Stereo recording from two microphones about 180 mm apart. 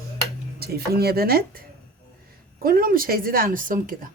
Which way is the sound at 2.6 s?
55° right (ahead or behind).